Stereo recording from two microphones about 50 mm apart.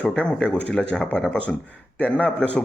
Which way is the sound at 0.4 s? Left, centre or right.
Left.